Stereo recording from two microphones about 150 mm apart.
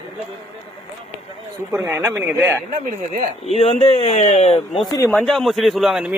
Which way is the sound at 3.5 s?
40° left (ahead or behind).